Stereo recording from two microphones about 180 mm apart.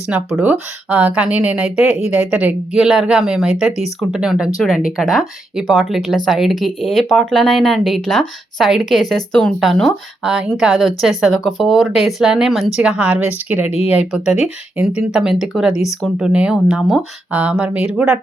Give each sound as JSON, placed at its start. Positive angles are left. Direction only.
{"t": 0.3, "sound": "speech", "side_deg": -10}
{"t": 13.7, "sound": "speech", "side_deg": 35}
{"t": 13.9, "sound": "speech", "side_deg": -5}